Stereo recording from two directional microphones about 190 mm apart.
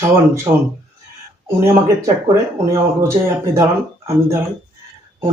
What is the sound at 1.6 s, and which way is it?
Speech, 15° right (ahead or behind).